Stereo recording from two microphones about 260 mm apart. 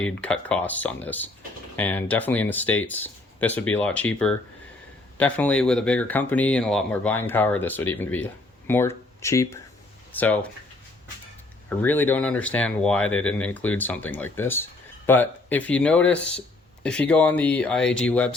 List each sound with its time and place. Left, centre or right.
0.0 s speech: centre
11.8 s speech: centre